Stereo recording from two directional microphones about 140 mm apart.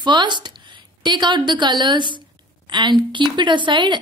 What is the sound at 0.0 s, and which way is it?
A woman's voice, 30° right (ahead or behind).